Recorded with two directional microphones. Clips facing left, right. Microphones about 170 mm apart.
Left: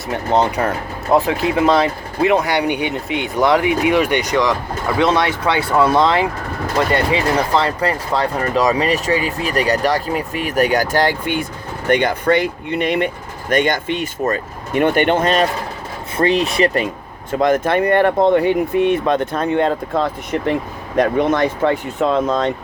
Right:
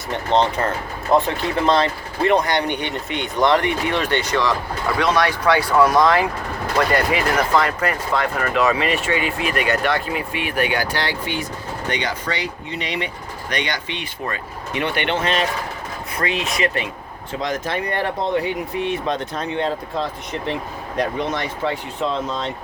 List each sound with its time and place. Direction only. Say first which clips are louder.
0.1 s speech: left 2 dB; 10° left (ahead or behind); by 16.8 s 35° left (ahead or behind)
17.3 s speech: left 9 dB; 55° left (ahead or behind)